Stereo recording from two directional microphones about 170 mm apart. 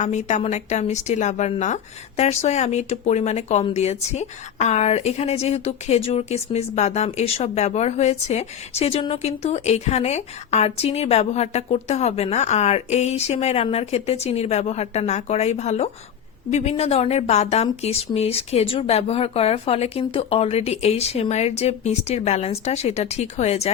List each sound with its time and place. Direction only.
0.0 s a woman's voice: 40° left (ahead or behind)